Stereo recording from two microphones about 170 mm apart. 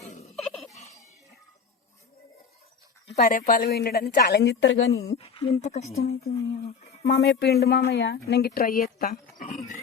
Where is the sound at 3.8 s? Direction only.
65° left (ahead or behind); by 4.8 s 90° left.